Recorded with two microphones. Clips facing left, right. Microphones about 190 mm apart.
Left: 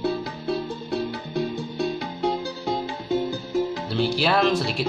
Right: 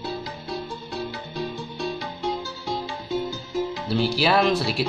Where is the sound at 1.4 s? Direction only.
55° left (ahead or behind).